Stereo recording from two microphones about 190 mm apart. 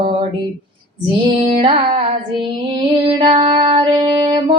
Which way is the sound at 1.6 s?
30° right (ahead or behind).